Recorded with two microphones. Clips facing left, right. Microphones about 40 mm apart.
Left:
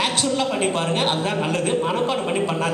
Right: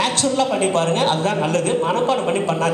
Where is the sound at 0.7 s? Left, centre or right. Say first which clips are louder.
Right 4 dB; centre.